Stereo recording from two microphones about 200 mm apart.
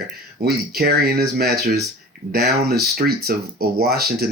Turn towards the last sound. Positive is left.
turn(degrees=-50)  # may be behind; listen again after turning